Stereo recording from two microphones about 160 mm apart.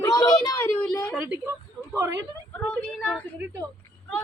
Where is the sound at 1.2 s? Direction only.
10° right (ahead or behind).